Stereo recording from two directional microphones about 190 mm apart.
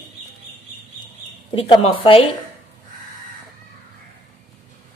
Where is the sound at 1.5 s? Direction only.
30° left (ahead or behind).